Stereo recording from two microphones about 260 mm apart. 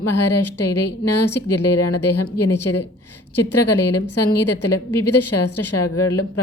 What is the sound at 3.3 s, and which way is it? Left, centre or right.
A woman's voice, left.